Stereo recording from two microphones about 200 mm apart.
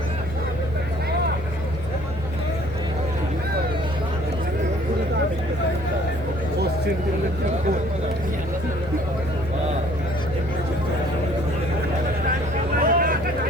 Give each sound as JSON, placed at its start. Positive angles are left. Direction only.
{"t": 12.8, "sound": "vehicle", "side_deg": -45}